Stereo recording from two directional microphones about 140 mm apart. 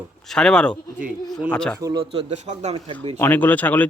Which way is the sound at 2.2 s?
55° right (ahead or behind).